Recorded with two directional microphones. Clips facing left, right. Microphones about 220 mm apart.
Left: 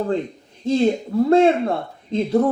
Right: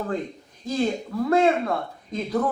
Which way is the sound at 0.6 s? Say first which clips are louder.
Left 7 dB; 25° left (ahead or behind).